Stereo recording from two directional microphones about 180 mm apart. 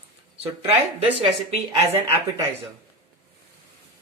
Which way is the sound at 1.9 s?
15° right (ahead or behind).